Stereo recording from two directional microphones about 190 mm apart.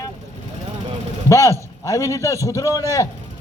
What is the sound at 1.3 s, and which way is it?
A man's voice, 15° left (ahead or behind).